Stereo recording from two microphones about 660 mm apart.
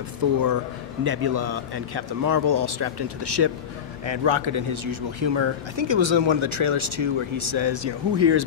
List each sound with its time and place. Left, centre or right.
0.2 s speech: right